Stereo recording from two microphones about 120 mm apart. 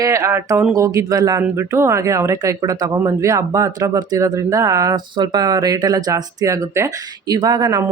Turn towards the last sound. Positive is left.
turn(degrees=-30)  # may be behind; listen again after turning